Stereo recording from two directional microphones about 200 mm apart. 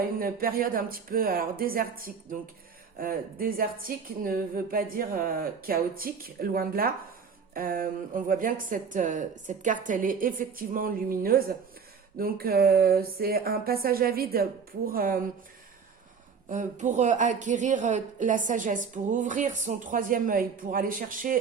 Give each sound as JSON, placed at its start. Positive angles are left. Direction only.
{"t": 0.2, "sound": "speech", "side_deg": -45}
{"t": 16.5, "sound": "a woman's voice", "side_deg": -40}